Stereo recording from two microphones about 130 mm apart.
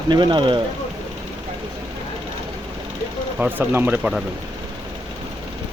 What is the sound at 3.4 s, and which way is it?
Speech, 15° right (ahead or behind).